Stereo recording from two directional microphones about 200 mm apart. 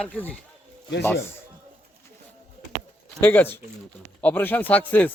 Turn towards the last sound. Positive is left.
turn(degrees=10)  # may be behind; listen again after turning